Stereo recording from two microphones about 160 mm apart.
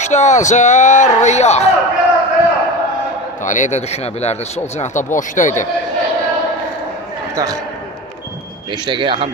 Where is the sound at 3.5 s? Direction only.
50° left (ahead or behind).